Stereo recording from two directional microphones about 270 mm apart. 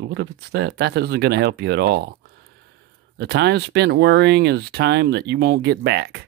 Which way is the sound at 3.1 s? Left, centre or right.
Right.